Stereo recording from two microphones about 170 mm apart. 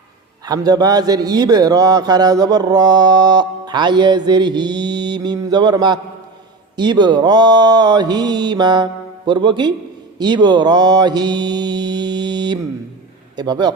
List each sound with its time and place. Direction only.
0.4 s a man's voice: 20° right (ahead or behind)